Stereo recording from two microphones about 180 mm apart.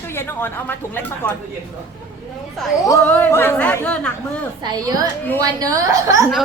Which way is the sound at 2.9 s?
10° left (ahead or behind).